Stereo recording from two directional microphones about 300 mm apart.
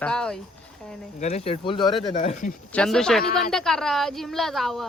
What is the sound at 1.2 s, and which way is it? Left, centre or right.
Speech, left.